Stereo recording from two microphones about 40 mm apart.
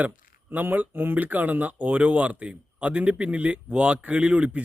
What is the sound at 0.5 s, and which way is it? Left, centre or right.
Speech, right.